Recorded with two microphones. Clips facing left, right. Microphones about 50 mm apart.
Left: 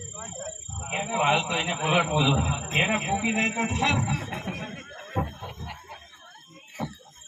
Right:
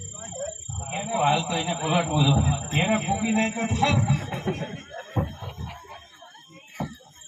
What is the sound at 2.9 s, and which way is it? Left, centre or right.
A man's voice, left.